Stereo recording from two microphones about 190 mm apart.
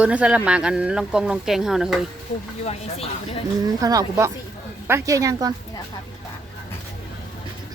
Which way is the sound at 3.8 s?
20° right (ahead or behind).